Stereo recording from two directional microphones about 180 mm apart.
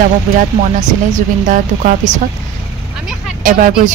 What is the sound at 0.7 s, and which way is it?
A woman's voice, 45° right (ahead or behind).